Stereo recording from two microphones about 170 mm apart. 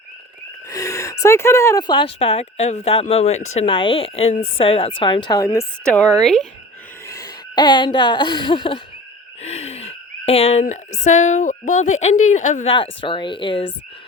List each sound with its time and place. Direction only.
0.7 s gasp: 20° left (ahead or behind)
1.9 s speech: 30° left (ahead or behind)
5.9 s speech: 5° left (ahead or behind)
7.1 s speech: 25° left (ahead or behind)
9.4 s a sound: 40° left (ahead or behind)
12.6 s speech: 30° left (ahead or behind)